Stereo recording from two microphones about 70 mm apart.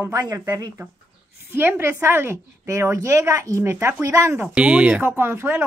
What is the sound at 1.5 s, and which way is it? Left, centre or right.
A woman's voice, right.